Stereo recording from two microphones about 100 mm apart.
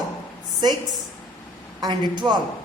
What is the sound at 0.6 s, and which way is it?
Speech, 45° right (ahead or behind).